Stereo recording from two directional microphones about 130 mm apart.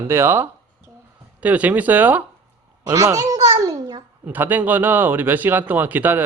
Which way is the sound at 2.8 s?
30° right (ahead or behind).